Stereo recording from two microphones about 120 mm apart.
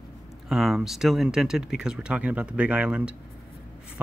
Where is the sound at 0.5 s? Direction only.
Centre (ahead or behind).